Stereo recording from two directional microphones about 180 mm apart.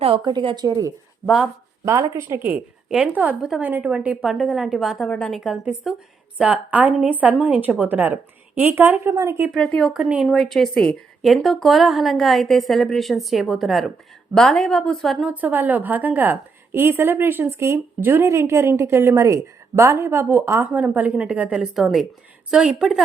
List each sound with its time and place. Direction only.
0.0 s a woman's voice: 30° right (ahead or behind)
9.6 s a woman's voice: 5° left (ahead or behind)